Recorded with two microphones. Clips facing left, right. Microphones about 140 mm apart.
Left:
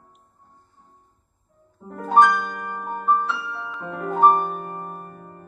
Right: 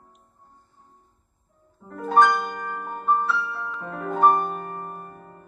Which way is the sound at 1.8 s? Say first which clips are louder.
Left 3 dB; 15° left (ahead or behind).